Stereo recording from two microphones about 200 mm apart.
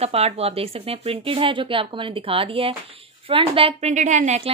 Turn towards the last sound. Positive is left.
turn(degrees=-35)  # may be behind; listen again after turning